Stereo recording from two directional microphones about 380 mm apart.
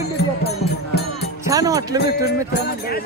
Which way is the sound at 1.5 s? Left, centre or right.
Centre.